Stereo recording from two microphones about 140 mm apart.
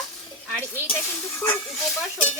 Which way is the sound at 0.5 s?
15° left (ahead or behind).